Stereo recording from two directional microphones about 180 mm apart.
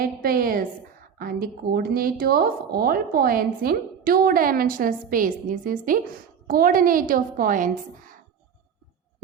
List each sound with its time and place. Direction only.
0.0 s a woman's voice: 55° right (ahead or behind)